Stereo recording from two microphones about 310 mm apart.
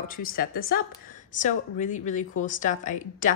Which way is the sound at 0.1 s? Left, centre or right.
Left.